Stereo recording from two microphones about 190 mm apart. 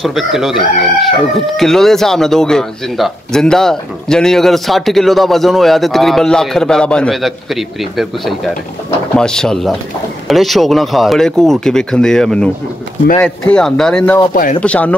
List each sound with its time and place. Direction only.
0.0 s speech: centre (ahead or behind)
14.3 s speech: 45° left (ahead or behind)
14.6 s speech: 5° left (ahead or behind)